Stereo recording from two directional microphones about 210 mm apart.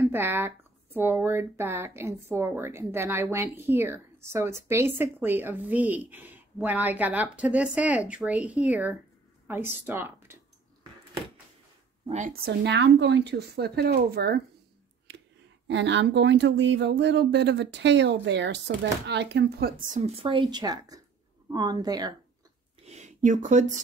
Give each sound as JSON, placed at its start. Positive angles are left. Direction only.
{"t": 0.0, "sound": "speech", "side_deg": -10}
{"t": 12.1, "sound": "speech", "side_deg": -40}
{"t": 15.7, "sound": "speech", "side_deg": -55}
{"t": 19.9, "sound": "a woman's voice", "side_deg": -30}
{"t": 22.8, "sound": "a sound", "side_deg": -35}